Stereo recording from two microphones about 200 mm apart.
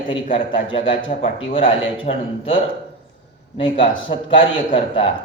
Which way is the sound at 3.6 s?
25° left (ahead or behind).